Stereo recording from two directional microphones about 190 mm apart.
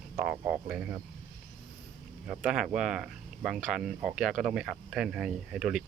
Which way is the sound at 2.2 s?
5° right (ahead or behind).